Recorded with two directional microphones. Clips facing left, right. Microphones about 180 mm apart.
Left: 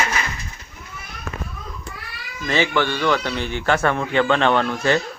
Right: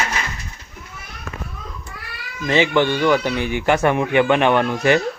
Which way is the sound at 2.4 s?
20° right (ahead or behind).